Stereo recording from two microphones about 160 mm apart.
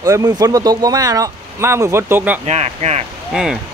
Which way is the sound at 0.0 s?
25° right (ahead or behind).